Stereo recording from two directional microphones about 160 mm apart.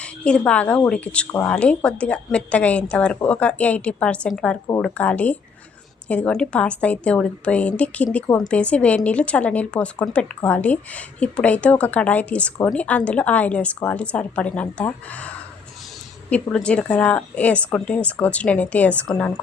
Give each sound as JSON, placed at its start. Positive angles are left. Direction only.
{"t": 0.0, "sound": "speech", "side_deg": 5}
{"t": 16.3, "sound": "speech", "side_deg": 5}